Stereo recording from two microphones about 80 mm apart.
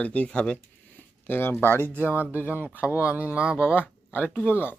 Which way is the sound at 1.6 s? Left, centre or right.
Left.